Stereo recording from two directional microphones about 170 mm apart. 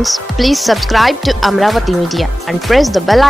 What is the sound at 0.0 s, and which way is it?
Speech, centre (ahead or behind).